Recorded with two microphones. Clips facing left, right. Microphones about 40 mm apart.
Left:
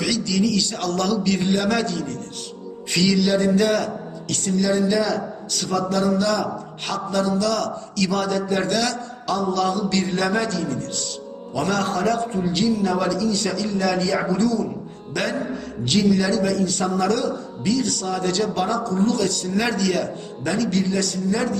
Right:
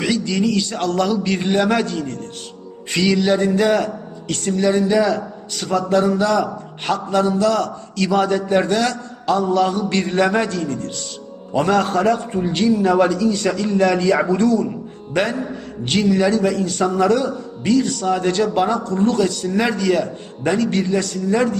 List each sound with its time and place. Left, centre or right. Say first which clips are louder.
0.0 s speech: right 2 dB; right
0.9 s a man's voice: right 1 dB; right
12.1 s a man's voice: right 2 dB; right
12.5 s a man's voice: right 6 dB; right
16.8 s a man's voice: right 7 dB; right
20.5 s a man's voice: right 4 dB; right